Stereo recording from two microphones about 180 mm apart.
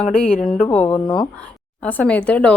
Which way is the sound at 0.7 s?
10° left (ahead or behind).